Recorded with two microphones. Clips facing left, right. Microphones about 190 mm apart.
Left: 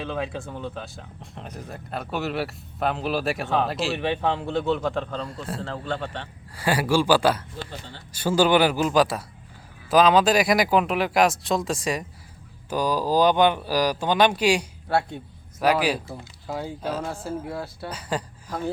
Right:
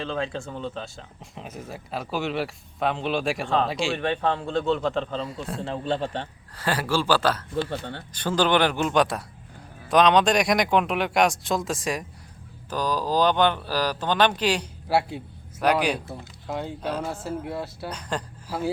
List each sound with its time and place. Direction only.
0.0 s speech: 5° left (ahead or behind)
4.9 s speech: centre (ahead or behind)
5.6 s a man's voice: 20° right (ahead or behind)
6.6 s speech: 10° left (ahead or behind)
7.5 s speech: 60° right (ahead or behind)
8.1 s speech: 10° left (ahead or behind)
12.7 s speech: 10° left (ahead or behind)
14.8 s speech: 5° right (ahead or behind)
15.6 s speech: 5° left (ahead or behind)
18.4 s speech: 10° right (ahead or behind)